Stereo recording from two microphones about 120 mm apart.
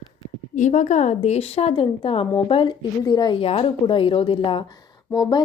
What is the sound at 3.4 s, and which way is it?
Speech, 50° left (ahead or behind).